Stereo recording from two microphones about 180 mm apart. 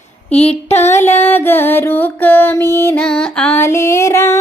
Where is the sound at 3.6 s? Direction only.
15° left (ahead or behind).